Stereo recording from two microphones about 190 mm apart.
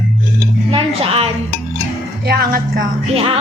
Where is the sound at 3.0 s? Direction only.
30° right (ahead or behind).